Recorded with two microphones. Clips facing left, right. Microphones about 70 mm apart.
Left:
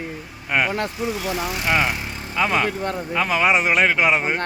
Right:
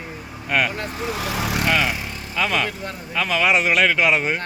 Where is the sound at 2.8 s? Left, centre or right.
Left.